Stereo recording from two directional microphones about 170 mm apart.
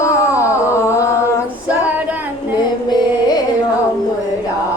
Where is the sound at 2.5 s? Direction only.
25° left (ahead or behind).